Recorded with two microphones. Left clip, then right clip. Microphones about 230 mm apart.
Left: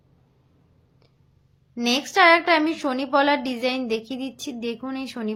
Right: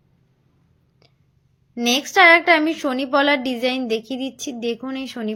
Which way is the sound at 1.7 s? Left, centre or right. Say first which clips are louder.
Right 4 dB; centre.